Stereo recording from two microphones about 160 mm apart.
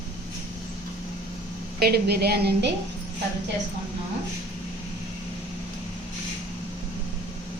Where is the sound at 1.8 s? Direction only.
85° right.